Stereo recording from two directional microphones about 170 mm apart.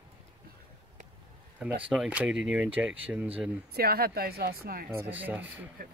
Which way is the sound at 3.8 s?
65° right (ahead or behind).